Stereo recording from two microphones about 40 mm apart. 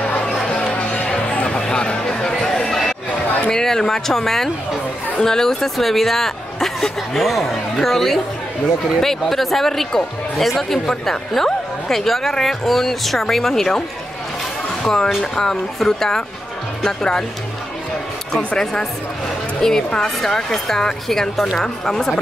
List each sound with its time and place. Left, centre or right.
0.3 s music: centre
0.6 s music: left; by 3.0 s centre
3.1 s a sound: left
3.4 s speech: centre
10.9 s a woman's voice: centre
18.6 s a woman's voice: centre